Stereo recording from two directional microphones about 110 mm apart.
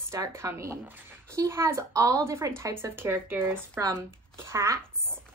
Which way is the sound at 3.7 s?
30° right (ahead or behind).